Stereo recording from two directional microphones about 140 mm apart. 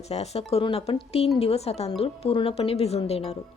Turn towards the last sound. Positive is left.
turn(degrees=50)  # may be behind; listen again after turning